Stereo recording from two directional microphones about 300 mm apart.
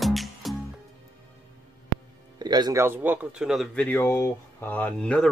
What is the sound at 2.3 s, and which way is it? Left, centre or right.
Speech, centre.